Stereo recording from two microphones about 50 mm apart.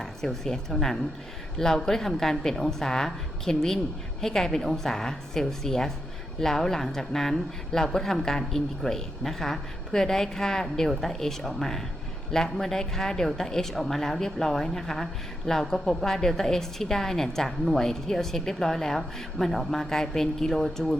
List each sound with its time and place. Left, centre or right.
0.0 s a woman's voice: centre